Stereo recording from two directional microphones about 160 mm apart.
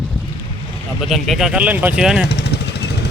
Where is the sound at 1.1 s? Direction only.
Centre (ahead or behind).